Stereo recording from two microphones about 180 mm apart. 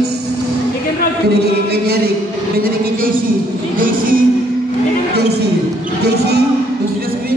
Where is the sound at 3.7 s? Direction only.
50° right (ahead or behind).